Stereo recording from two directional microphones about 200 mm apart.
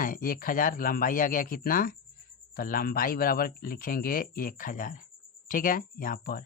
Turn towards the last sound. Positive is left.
turn(degrees=45)  # may be behind; listen again after turning